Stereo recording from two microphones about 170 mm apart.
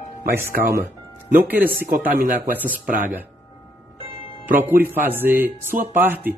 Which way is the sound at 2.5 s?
10° right (ahead or behind).